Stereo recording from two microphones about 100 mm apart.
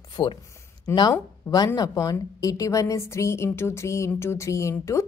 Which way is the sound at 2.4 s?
35° left (ahead or behind).